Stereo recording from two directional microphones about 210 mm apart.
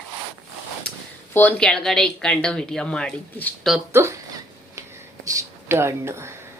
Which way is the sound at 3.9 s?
15° right (ahead or behind).